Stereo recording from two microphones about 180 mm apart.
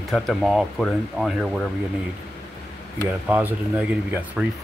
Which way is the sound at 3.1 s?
10° right (ahead or behind).